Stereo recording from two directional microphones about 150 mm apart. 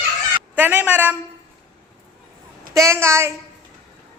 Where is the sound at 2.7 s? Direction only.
20° right (ahead or behind).